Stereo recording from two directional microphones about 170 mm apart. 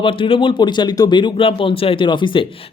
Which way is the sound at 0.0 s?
30° left (ahead or behind).